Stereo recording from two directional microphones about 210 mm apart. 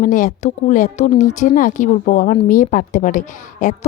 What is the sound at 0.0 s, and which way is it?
A woman's voice, 40° left (ahead or behind).